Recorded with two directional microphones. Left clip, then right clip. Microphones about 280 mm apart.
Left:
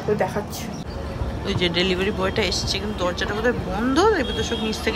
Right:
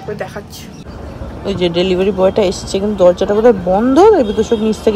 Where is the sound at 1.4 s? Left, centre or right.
Centre.